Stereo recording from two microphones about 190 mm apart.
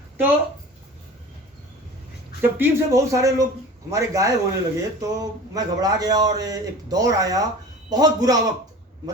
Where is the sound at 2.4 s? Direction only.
15° right (ahead or behind).